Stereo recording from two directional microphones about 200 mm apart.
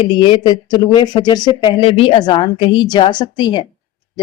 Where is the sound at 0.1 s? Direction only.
25° left (ahead or behind).